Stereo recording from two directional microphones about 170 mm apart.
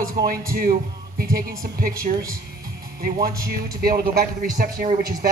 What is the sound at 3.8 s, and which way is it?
Speech, 55° right (ahead or behind).